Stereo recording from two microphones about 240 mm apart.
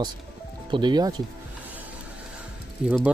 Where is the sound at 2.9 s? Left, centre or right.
Centre.